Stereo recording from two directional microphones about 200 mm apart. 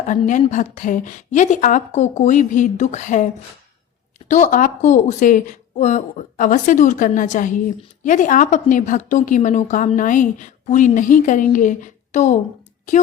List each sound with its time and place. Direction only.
0.1 s speech: 40° left (ahead or behind)
4.3 s speech: 40° left (ahead or behind)